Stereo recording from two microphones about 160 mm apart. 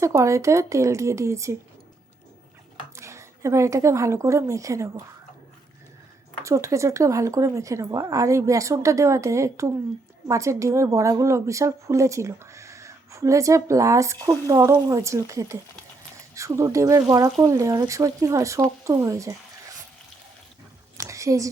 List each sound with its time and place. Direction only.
0.0 s a woman's voice: 20° right (ahead or behind)
2.9 s a woman's voice: 20° right (ahead or behind)
6.4 s a woman's voice: 20° right (ahead or behind)
21.0 s a sound: 20° right (ahead or behind)